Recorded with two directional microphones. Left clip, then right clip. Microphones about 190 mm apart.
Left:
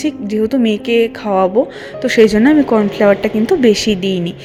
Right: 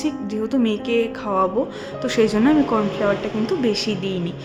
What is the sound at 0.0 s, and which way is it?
A woman's voice, 30° left (ahead or behind).